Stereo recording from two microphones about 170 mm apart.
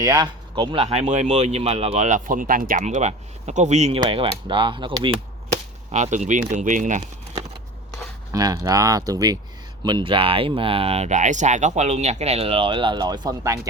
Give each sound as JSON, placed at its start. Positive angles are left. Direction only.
{"t": 0.0, "sound": "speech", "side_deg": -20}
{"t": 4.0, "sound": "speech", "side_deg": -30}
{"t": 5.9, "sound": "speech", "side_deg": -45}
{"t": 8.3, "sound": "speech", "side_deg": -20}